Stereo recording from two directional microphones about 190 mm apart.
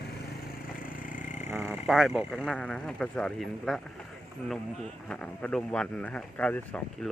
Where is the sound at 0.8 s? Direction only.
45° left (ahead or behind).